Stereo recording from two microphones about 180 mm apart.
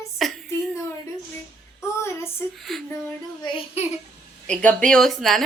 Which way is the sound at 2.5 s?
Centre (ahead or behind).